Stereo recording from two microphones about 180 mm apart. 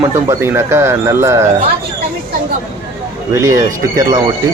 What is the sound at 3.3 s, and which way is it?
Speech, 15° right (ahead or behind).